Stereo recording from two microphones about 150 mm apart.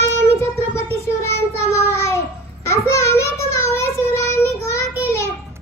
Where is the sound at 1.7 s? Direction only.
20° left (ahead or behind).